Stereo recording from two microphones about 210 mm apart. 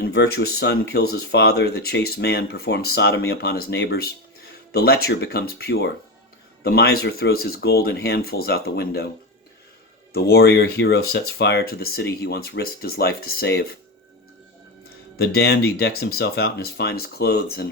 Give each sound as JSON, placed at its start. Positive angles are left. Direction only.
{"t": 0.0, "sound": "speech", "side_deg": 50}
{"t": 10.1, "sound": "speech", "side_deg": 50}
{"t": 15.1, "sound": "speech", "side_deg": 50}